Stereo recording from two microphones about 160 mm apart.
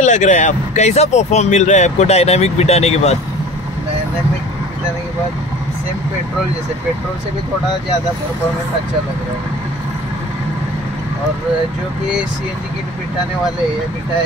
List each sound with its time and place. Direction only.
0.0 s speech: 50° left (ahead or behind)